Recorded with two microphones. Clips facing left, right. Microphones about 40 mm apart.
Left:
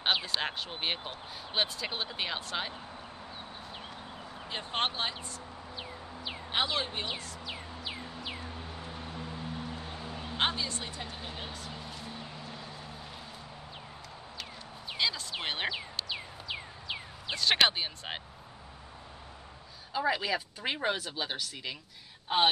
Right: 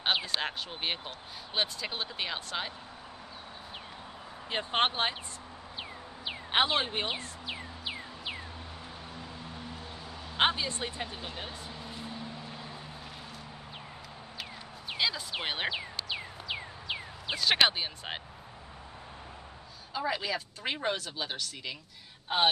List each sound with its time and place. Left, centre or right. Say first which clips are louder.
0.1 s speech: even; centre
0.4 s speech: even; centre
4.5 s speech: right 4 dB; right
5.8 s music: right 1 dB; right
10.0 s vehicle: left 3 dB; left
10.3 s speech: right 4 dB; centre
11.2 s a sound: right 1 dB; centre
15.0 s a sound: right 1 dB; centre
15.7 s a sound: right 1 dB; centre
17.4 s speech: even; centre
19.9 s speech: left 2 dB; centre